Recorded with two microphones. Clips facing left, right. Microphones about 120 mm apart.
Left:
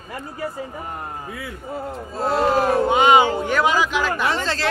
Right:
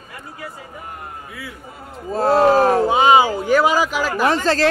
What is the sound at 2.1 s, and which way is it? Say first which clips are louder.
Speech: right 6 dB; 45° right (ahead or behind).